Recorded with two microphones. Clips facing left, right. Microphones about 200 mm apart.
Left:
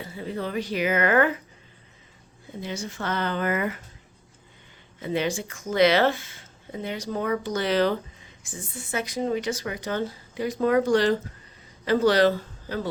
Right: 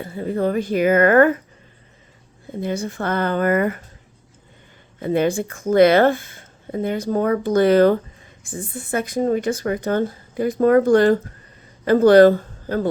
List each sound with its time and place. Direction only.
0.0 s speech: 50° right (ahead or behind)
2.6 s speech: 55° right (ahead or behind)
4.9 s speech: 50° right (ahead or behind)